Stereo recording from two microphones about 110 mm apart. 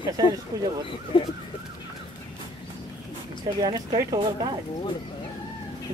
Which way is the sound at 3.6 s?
35° right (ahead or behind).